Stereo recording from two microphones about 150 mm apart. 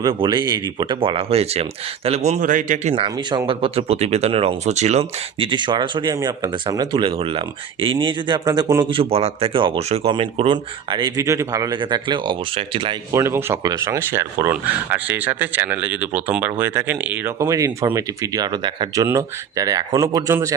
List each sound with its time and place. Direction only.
0.0 s a man's voice: 30° right (ahead or behind); by 2.9 s 55° right (ahead or behind)
2.9 s speech: 35° right (ahead or behind)
11.2 s speech: 20° right (ahead or behind)
13.1 s speech: 20° right (ahead or behind)